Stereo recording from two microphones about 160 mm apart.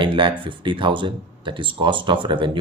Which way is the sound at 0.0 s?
30° right (ahead or behind).